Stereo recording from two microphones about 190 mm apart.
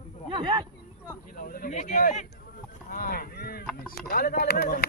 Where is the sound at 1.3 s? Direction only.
50° left (ahead or behind).